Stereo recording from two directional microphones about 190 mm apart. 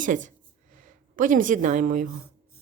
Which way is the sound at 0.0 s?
40° right (ahead or behind).